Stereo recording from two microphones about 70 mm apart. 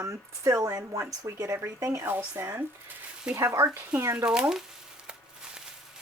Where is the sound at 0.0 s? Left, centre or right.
Right.